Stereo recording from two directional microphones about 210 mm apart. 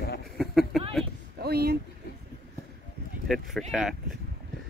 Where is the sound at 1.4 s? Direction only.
50° right (ahead or behind).